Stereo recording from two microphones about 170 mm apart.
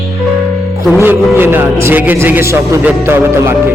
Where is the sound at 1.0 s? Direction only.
10° right (ahead or behind).